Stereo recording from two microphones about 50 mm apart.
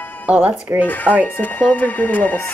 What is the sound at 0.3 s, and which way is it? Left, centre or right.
Speech, right.